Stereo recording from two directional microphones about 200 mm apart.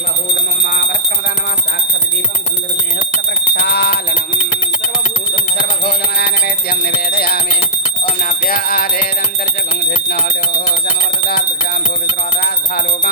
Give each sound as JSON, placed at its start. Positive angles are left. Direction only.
{"t": 3.5, "sound": "alarm", "side_deg": 55}
{"t": 5.8, "sound": "music", "side_deg": 55}